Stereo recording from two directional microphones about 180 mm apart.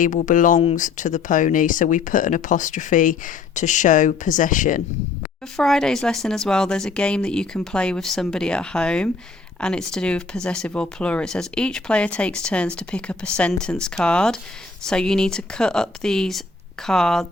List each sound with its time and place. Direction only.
0.0 s speech: 45° left (ahead or behind)
5.5 s speech: centre (ahead or behind)